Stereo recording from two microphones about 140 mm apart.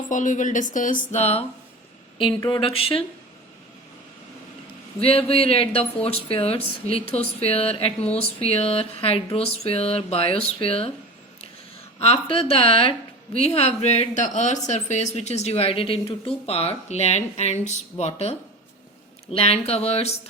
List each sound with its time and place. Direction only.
0.1 s speech: 65° left (ahead or behind)
1.2 s speech: 50° left (ahead or behind)
2.5 s speech: 40° left (ahead or behind)
4.9 s speech: 45° left (ahead or behind)
11.9 s speech: 45° left (ahead or behind)